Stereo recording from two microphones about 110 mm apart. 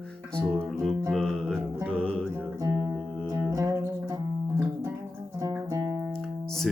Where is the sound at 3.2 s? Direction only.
35° right (ahead or behind).